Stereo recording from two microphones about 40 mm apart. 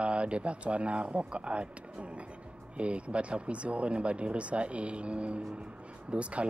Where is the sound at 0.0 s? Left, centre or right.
Right.